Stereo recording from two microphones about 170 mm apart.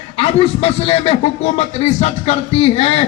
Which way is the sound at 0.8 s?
35° left (ahead or behind).